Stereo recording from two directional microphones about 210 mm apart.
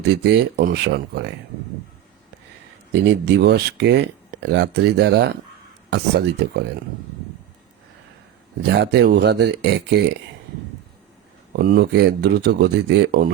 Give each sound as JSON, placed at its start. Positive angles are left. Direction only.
{"t": 0.1, "sound": "speech", "side_deg": -50}
{"t": 3.3, "sound": "speech", "side_deg": -55}
{"t": 8.6, "sound": "speech", "side_deg": -55}
{"t": 11.5, "sound": "speech", "side_deg": -45}